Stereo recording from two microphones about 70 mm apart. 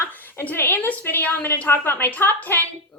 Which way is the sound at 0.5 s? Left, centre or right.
Left.